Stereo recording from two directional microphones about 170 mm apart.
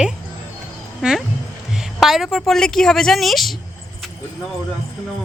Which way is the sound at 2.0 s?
Centre (ahead or behind).